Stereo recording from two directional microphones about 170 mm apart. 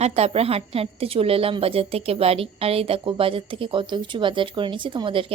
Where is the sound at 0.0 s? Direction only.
40° right (ahead or behind).